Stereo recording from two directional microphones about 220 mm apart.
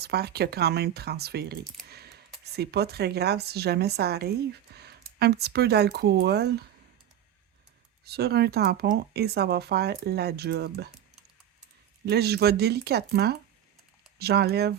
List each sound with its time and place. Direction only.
0.0 s a woman's voice: 45° right (ahead or behind)
1.9 s a sound: 45° right (ahead or behind)
2.4 s a woman's voice: 45° right (ahead or behind)
8.0 s a woman's voice: 45° right (ahead or behind)
12.0 s a woman's voice: 45° right (ahead or behind)